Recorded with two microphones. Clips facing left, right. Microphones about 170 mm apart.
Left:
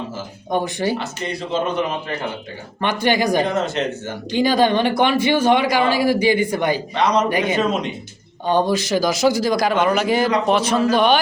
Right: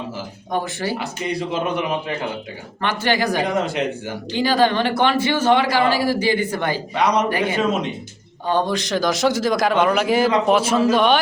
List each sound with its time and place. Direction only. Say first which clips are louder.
0.5 s speech: left 3 dB; 20° left (ahead or behind)
2.8 s speech: left 2 dB; 15° left (ahead or behind)
3.4 s speech: even; 10° right (ahead or behind)
4.3 s speech: left 2 dB; 15° left (ahead or behind)
6.9 s speech: right 1 dB; 10° right (ahead or behind)
7.3 s speech: left 1 dB; 15° left (ahead or behind)
7.5 s a man's voice: left 1 dB; 5° right (ahead or behind)
8.4 s speech: left 2 dB; 15° left (ahead or behind)
8.7 s a man's voice: left 2 dB; 5° left (ahead or behind)